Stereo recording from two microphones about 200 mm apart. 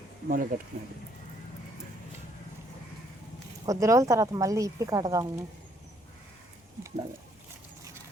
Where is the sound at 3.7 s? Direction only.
15° right (ahead or behind).